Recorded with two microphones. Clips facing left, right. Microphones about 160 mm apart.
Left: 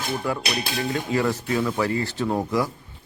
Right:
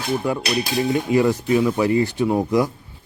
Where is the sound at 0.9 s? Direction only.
15° right (ahead or behind).